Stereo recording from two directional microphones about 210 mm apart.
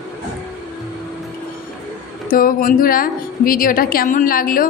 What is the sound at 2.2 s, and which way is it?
A woman's voice, 40° left (ahead or behind).